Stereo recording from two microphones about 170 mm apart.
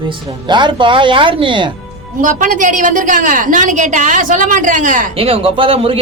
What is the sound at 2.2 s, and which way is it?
A woman's voice, 50° right (ahead or behind).